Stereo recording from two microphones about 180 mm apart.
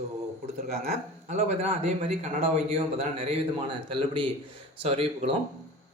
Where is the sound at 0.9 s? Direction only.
40° right (ahead or behind).